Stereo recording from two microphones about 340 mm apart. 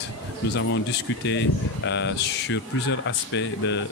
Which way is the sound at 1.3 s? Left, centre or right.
Left.